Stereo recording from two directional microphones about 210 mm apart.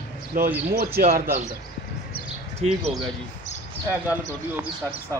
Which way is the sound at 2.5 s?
5° right (ahead or behind).